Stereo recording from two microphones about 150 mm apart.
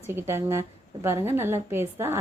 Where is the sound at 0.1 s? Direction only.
15° right (ahead or behind).